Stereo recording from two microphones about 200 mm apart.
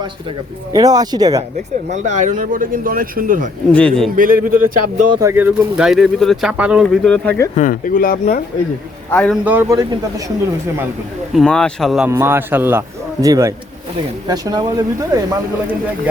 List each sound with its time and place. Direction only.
0.0 s speech: 20° right (ahead or behind)
1.9 s speech: 40° right (ahead or behind)
3.7 s speech: 5° left (ahead or behind)
4.1 s speech: 45° right (ahead or behind)
5.2 s speech: 10° right (ahead or behind); by 7.3 s 5° left (ahead or behind)
7.5 s speech: 40° left (ahead or behind)
9.0 s a man's voice: 10° left (ahead or behind)
9.3 s a man's voice: 10° right (ahead or behind)
11.3 s speech: 5° left (ahead or behind)
12.0 s a man's voice: 10° right (ahead or behind)